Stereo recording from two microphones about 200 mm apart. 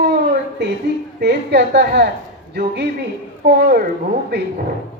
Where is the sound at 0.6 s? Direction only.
55° right (ahead or behind).